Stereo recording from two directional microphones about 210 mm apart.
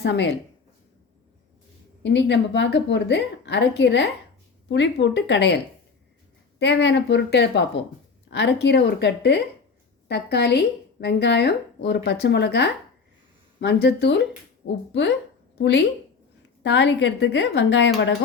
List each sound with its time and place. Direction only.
0.0 s a woman's voice: 55° left (ahead or behind)
2.0 s a woman's voice: 55° left (ahead or behind)
6.6 s a woman's voice: 55° left (ahead or behind)
15.6 s a woman's voice: 55° left (ahead or behind)